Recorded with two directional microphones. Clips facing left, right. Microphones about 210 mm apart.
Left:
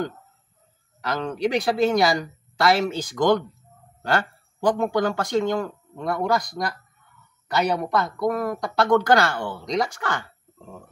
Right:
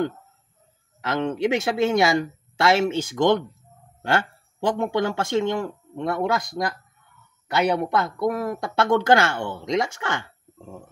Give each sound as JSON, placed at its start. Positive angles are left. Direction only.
{"t": 1.0, "sound": "speech", "side_deg": -25}
{"t": 8.0, "sound": "speech", "side_deg": -25}